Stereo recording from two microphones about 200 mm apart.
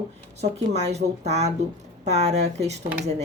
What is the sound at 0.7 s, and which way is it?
A woman's voice, 35° right (ahead or behind).